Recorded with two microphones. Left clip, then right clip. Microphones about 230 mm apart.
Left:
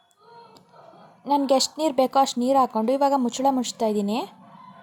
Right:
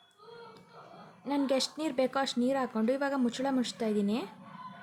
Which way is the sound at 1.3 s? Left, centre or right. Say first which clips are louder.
Left 10 dB; left.